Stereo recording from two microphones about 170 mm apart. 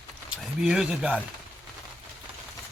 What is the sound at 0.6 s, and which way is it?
Speech, 5° right (ahead or behind).